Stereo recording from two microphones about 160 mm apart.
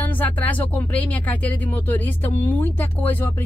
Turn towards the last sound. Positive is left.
turn(degrees=10)  # may be behind; listen again after turning